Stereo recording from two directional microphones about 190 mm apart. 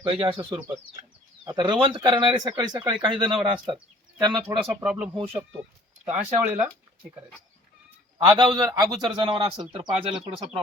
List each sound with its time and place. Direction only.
0.0 s speech: 25° right (ahead or behind)
4.5 s speech: 5° right (ahead or behind)
8.3 s speech: 25° right (ahead or behind)